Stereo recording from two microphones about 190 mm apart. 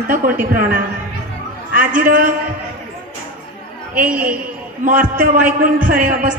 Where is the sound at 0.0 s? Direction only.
50° right (ahead or behind).